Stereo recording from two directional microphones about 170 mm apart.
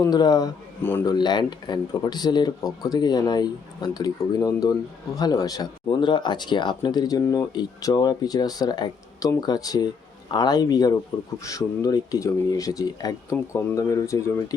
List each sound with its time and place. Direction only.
0.0 s speech: 25° left (ahead or behind)
0.8 s speech: 10° left (ahead or behind)
1.1 s speech: 25° left (ahead or behind)